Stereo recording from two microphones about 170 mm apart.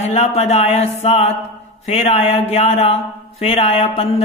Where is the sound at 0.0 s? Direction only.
40° left (ahead or behind).